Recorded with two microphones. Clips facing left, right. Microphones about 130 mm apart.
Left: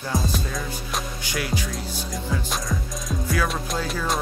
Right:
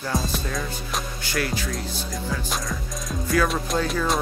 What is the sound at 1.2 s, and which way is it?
Music, 15° left (ahead or behind).